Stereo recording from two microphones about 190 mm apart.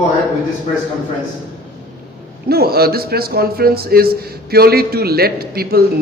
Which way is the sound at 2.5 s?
55° right (ahead or behind).